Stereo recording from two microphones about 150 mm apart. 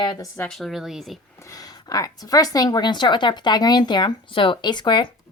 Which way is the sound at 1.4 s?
25° left (ahead or behind).